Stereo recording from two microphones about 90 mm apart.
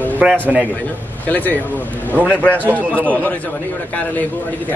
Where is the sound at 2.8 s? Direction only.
20° right (ahead or behind).